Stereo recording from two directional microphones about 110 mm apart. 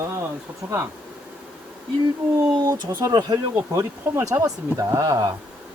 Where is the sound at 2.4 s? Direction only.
30° right (ahead or behind).